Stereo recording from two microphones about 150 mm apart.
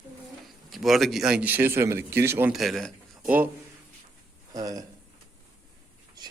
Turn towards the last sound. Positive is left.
turn(degrees=-25)  # may be behind; listen again after turning